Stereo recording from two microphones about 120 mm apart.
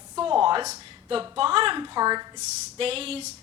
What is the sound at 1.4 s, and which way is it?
Speech, 50° right (ahead or behind).